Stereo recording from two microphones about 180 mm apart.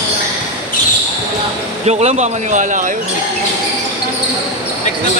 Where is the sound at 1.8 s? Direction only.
35° right (ahead or behind).